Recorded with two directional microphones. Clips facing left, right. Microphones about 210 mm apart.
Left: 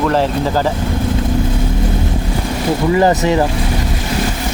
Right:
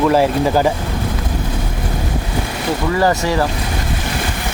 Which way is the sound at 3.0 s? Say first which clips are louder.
Left 2 dB; 20° left (ahead or behind).